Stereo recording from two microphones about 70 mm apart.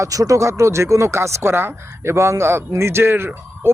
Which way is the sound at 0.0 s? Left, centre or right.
Right.